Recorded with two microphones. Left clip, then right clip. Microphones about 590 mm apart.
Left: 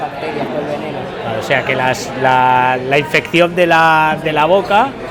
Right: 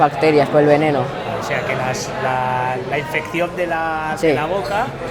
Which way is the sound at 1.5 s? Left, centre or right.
Left.